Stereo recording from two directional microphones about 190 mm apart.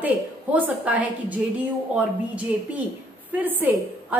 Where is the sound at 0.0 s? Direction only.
10° right (ahead or behind).